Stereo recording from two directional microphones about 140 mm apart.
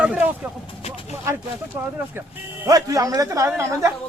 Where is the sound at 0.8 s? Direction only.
45° left (ahead or behind).